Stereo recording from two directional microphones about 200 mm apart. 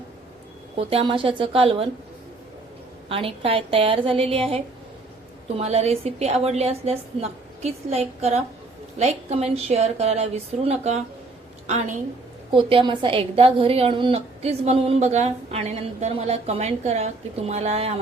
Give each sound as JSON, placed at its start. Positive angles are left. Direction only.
{"t": 0.8, "sound": "a woman's voice", "side_deg": -30}
{"t": 3.1, "sound": "a woman's voice", "side_deg": -25}